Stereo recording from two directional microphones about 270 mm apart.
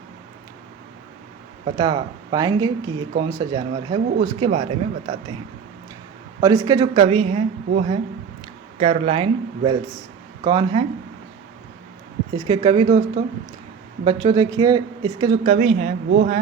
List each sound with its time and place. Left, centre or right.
1.6 s speech: centre
6.4 s speech: centre
12.5 s speech: right